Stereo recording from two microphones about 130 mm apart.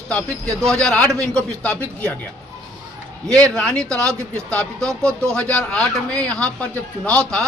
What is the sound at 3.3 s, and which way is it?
A man's voice, 5° left (ahead or behind).